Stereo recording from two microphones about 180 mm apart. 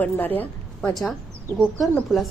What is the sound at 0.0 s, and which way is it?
A woman's voice, 10° left (ahead or behind).